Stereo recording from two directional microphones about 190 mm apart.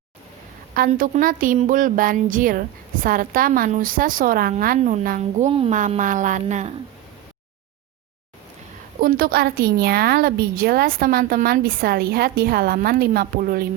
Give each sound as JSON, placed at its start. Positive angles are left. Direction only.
{"t": 0.7, "sound": "a woman's voice", "side_deg": -50}
{"t": 5.5, "sound": "a woman's voice", "side_deg": -30}
{"t": 5.7, "sound": "speech", "side_deg": -40}
{"t": 9.0, "sound": "a woman's voice", "side_deg": -50}